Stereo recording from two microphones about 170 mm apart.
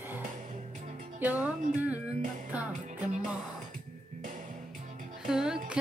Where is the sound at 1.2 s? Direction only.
10° right (ahead or behind).